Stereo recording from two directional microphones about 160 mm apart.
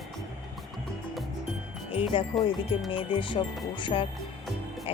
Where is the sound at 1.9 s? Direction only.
35° left (ahead or behind).